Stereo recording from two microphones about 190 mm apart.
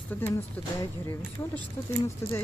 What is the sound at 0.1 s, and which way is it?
Speech, 10° left (ahead or behind).